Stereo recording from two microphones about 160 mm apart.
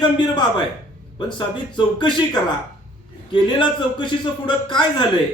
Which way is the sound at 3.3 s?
30° left (ahead or behind).